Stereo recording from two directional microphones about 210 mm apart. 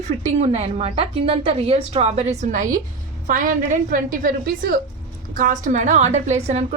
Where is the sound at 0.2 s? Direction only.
30° right (ahead or behind).